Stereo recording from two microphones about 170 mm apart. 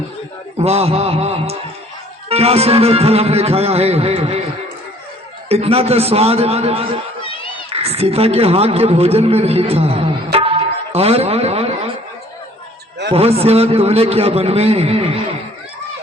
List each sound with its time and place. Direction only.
0.6 s a man's voice: 35° right (ahead or behind)
5.5 s a man's voice: 35° right (ahead or behind)
10.3 s music: 35° right (ahead or behind)
13.1 s a man's voice: 35° right (ahead or behind)